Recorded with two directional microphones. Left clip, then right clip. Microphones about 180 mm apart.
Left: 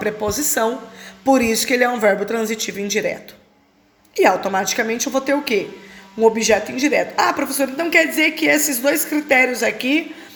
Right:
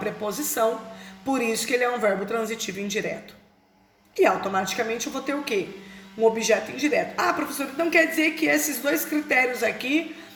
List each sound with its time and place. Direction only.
0.0 s a woman's voice: 45° left (ahead or behind)